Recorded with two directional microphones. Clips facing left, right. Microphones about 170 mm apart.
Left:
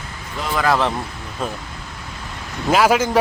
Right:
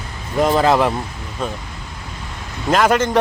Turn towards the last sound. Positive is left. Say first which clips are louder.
# even
turn(degrees=5)  # may be behind; listen again after turning